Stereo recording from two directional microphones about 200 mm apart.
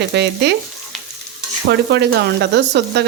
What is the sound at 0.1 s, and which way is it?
Frying, 60° right (ahead or behind).